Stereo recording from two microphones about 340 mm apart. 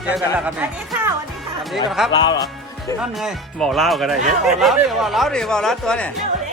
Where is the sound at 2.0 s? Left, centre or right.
Centre.